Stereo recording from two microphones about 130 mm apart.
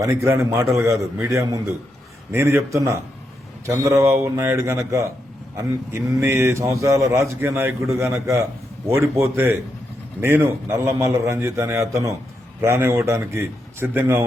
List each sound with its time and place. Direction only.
0.0 s a man's voice: 20° right (ahead or behind)